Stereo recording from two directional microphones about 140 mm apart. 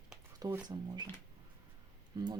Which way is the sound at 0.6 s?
30° right (ahead or behind).